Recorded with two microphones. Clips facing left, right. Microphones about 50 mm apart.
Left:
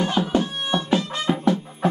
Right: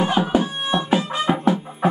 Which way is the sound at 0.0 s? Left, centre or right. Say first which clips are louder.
Right 3 dB; centre.